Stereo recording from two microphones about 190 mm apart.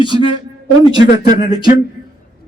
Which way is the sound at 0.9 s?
20° right (ahead or behind).